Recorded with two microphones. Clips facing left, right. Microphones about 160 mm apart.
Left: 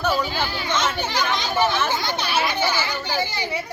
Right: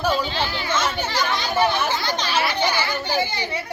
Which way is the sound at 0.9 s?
10° left (ahead or behind).